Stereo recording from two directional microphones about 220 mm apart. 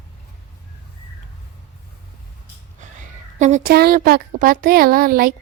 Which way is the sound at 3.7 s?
45° right (ahead or behind).